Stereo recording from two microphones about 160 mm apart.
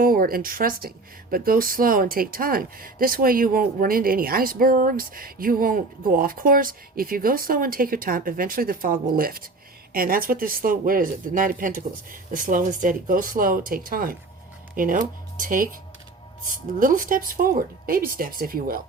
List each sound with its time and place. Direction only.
0.0 s speech: 65° right (ahead or behind)
16.8 s speech: 60° right (ahead or behind)